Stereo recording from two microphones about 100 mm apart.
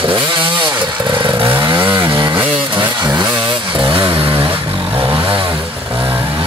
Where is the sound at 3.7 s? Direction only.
60° right (ahead or behind).